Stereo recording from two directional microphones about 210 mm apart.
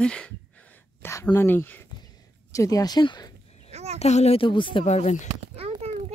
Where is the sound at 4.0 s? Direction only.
30° left (ahead or behind).